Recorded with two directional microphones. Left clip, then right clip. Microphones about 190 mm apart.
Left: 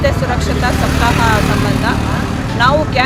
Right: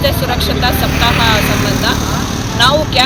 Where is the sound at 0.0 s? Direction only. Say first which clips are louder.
Right 1 dB; 5° left (ahead or behind).